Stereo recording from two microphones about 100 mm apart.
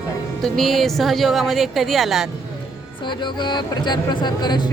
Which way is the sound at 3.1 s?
50° left (ahead or behind).